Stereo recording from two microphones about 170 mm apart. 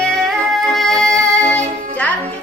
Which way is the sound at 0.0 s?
Centre (ahead or behind).